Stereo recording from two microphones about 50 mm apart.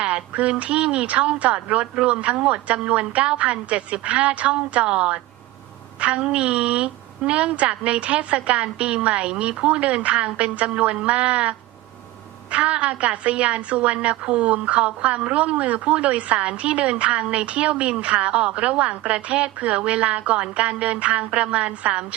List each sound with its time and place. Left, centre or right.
0.0 s a woman's voice: right